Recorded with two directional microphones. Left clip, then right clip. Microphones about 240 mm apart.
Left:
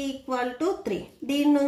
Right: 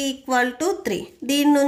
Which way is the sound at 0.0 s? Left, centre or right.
Right.